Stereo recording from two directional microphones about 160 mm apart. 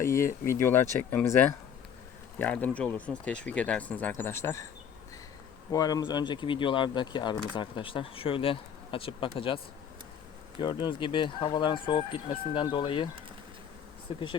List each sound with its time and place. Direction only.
0.0 s speech: 20° left (ahead or behind)
5.7 s speech: 25° left (ahead or behind)
10.6 s speech: 30° left (ahead or behind)